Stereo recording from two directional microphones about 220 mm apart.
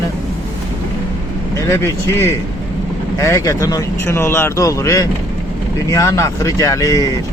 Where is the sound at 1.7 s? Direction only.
10° left (ahead or behind).